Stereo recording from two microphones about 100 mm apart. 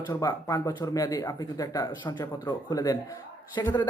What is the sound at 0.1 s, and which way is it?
Speech, 35° left (ahead or behind).